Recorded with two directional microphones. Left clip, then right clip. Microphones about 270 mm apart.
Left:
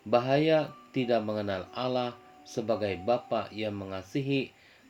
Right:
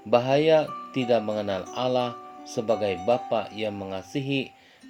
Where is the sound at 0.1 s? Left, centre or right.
Right.